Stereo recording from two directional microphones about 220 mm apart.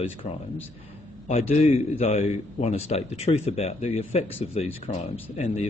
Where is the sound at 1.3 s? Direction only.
30° left (ahead or behind).